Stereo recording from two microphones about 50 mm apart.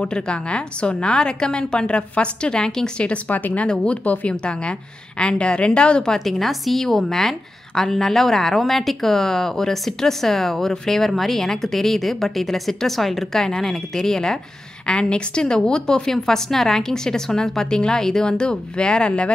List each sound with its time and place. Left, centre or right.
0.0 s a woman's voice: centre
3.3 s speech: left
3.6 s a woman's voice: left
6.1 s a woman's voice: centre
14.9 s a woman's voice: centre